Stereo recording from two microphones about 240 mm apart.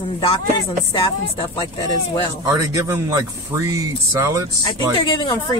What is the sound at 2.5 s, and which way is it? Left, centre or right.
Speech, centre.